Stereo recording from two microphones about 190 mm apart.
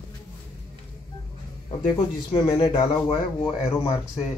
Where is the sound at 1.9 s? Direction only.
25° left (ahead or behind).